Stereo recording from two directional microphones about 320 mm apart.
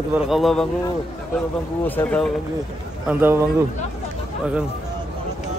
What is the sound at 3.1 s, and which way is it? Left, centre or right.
Speech, centre.